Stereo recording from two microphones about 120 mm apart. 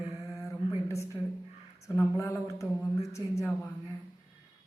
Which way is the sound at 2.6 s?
10° right (ahead or behind).